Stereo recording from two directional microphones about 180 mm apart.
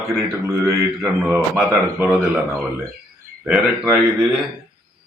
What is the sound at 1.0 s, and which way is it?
A man's voice, 5° right (ahead or behind).